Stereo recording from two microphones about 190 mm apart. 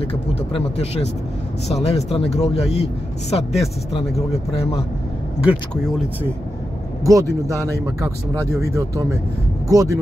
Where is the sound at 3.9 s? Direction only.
30° left (ahead or behind).